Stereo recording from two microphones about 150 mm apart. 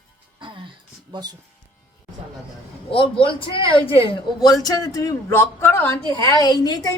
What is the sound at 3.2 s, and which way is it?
Speech, 35° left (ahead or behind).